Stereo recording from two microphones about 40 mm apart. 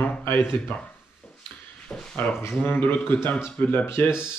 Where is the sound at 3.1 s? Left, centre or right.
Left.